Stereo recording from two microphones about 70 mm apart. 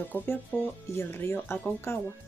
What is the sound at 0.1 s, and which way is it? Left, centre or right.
Speech, left.